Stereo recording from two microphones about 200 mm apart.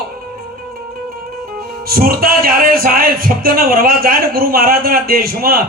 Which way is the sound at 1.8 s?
50° right (ahead or behind).